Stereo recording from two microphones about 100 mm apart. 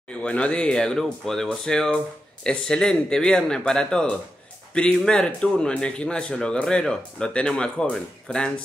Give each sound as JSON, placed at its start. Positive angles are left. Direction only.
{"t": 0.2, "sound": "speech", "side_deg": 10}